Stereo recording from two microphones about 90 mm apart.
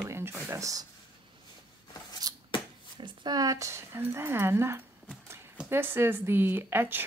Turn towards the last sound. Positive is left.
turn(degrees=-25)  # may be behind; listen again after turning